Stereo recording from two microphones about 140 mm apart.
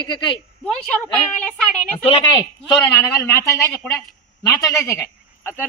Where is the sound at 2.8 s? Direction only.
25° left (ahead or behind).